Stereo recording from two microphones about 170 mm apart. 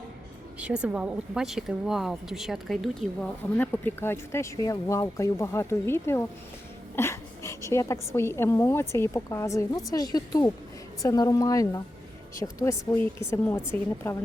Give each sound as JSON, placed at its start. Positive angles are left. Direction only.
{"t": 0.6, "sound": "a woman's voice", "side_deg": -5}